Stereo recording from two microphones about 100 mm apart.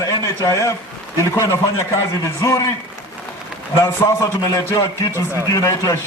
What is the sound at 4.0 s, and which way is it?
Speech, 35° left (ahead or behind).